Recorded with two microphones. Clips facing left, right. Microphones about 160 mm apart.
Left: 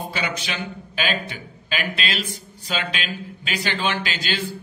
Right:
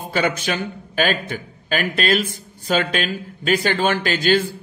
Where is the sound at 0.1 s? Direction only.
50° right (ahead or behind).